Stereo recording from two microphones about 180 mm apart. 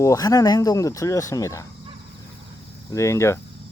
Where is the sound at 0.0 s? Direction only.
20° left (ahead or behind).